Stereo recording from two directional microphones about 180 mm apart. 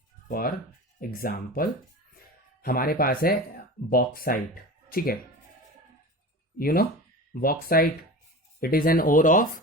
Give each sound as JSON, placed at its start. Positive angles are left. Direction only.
{"t": 0.3, "sound": "speech", "side_deg": 55}
{"t": 6.6, "sound": "speech", "side_deg": 55}